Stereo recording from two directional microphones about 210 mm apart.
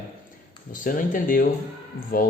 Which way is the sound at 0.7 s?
40° left (ahead or behind).